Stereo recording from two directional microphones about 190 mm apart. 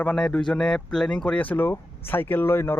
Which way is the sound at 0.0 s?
5° left (ahead or behind).